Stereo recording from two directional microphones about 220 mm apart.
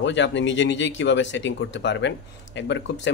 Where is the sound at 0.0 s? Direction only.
55° left (ahead or behind).